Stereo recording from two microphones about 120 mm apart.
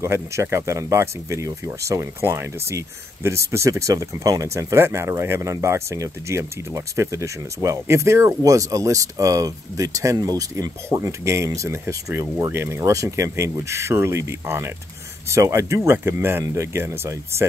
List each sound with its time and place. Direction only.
0.0 s speech: 25° right (ahead or behind)